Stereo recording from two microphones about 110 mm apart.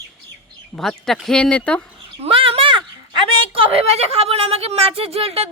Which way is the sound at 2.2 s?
60° right (ahead or behind).